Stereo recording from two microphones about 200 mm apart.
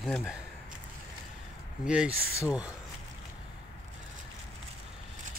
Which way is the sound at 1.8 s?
5° right (ahead or behind).